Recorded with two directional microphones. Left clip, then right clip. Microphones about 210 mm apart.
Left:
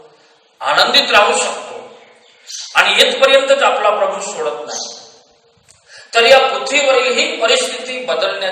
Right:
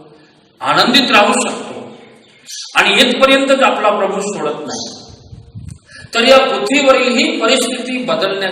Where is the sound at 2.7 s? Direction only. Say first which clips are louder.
Even; 30° right (ahead or behind).